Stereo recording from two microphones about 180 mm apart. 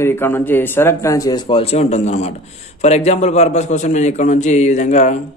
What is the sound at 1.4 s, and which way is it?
Speech, 30° left (ahead or behind).